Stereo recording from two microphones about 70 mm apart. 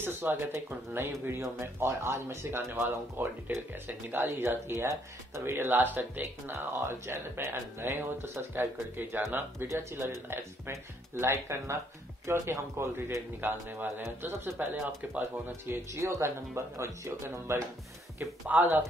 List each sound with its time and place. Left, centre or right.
0.0 s speech: right
4.7 s speech: right
5.4 s speech: right
6.5 s speech: right
15.9 s speech: right
18.5 s speech: right